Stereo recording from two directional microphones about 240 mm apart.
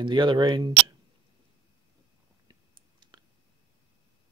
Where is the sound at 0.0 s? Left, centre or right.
Centre.